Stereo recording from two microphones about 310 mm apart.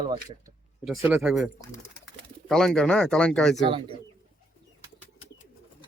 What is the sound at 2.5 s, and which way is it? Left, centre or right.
Speech, centre.